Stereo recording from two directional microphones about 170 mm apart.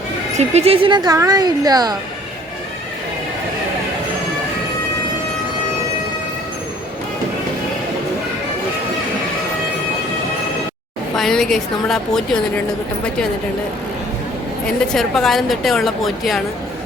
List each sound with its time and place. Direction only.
0.3 s speech: 40° right (ahead or behind); by 2.0 s 25° right (ahead or behind)
11.2 s a woman's voice: 5° left (ahead or behind)
14.9 s a woman's voice: centre (ahead or behind)